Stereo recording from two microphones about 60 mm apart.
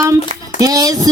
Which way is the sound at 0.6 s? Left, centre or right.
Right.